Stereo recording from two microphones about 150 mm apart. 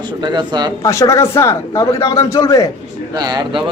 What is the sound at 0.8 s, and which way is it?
Speech, 20° left (ahead or behind).